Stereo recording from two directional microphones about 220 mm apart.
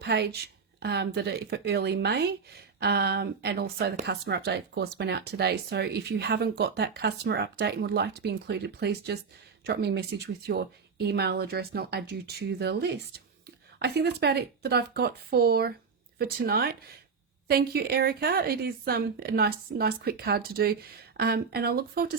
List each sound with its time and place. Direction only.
0.0 s a woman's voice: 50° right (ahead or behind)